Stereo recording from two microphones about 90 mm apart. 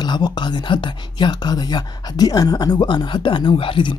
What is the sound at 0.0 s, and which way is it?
Speech, 55° left (ahead or behind).